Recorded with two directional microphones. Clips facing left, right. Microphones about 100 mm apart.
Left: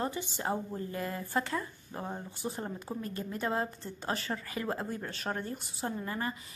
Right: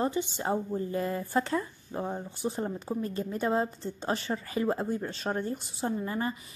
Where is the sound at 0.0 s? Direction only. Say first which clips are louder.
Right 5 dB; 25° right (ahead or behind).